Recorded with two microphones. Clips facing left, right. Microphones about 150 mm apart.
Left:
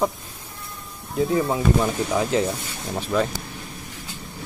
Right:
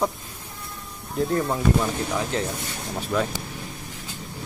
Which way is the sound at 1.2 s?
5° left (ahead or behind).